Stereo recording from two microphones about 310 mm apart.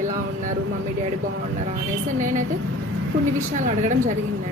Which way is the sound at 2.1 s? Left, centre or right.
Right.